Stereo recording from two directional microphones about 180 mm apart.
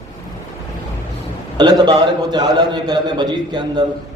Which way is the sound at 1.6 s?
25° right (ahead or behind).